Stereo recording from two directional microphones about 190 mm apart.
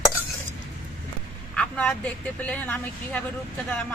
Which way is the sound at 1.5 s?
5° left (ahead or behind).